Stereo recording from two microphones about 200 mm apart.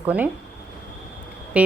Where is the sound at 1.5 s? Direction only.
5° right (ahead or behind).